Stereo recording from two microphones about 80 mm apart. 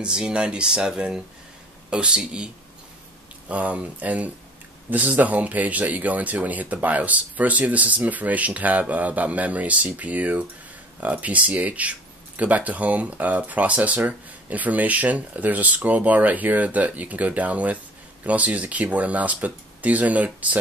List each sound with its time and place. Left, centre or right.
0.0 s speech: centre